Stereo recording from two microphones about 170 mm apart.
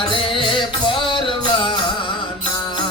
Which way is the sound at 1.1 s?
30° left (ahead or behind).